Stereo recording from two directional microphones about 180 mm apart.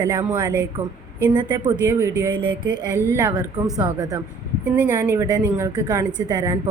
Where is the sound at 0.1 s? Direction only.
20° right (ahead or behind).